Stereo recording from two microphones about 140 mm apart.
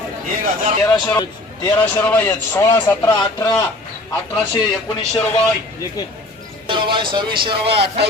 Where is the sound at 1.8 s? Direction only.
10° left (ahead or behind).